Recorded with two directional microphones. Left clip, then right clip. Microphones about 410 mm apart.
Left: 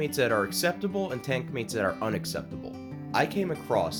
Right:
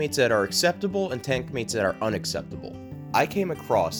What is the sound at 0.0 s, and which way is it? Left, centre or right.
Speech, centre.